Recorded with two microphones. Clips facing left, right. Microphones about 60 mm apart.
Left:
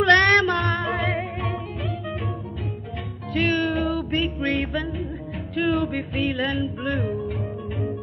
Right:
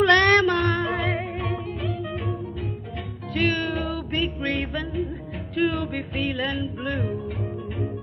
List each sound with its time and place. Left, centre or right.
0.1 s female singing: left
0.6 s music: centre
3.3 s music: centre